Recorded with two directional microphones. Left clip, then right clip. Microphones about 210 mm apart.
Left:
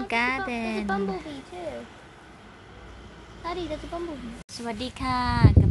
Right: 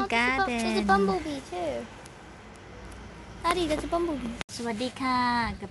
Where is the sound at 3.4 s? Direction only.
55° right (ahead or behind).